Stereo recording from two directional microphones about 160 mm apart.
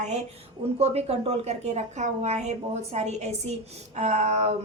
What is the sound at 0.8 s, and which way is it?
A woman's voice, 40° right (ahead or behind).